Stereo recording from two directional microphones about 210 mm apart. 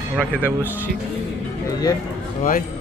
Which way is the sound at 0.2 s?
10° left (ahead or behind).